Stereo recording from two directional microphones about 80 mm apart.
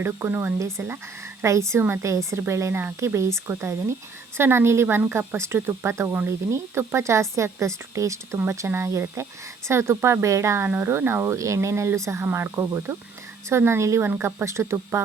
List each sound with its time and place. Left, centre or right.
0.0 s speech: right
1.4 s a woman's voice: right